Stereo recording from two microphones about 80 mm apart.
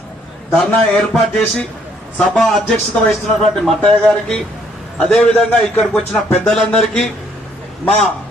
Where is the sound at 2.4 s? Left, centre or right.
Centre.